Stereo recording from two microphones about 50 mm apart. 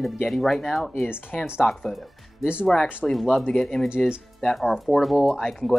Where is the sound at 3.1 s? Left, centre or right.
Centre.